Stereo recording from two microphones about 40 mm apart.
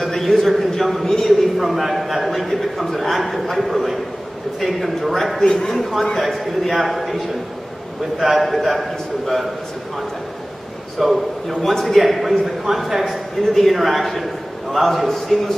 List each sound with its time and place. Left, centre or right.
0.0 s a man's voice: centre
1.6 s a man's voice: centre
5.4 s a man's voice: left
5.7 s a man's voice: centre
11.0 s a man's voice: centre
13.4 s a man's voice: centre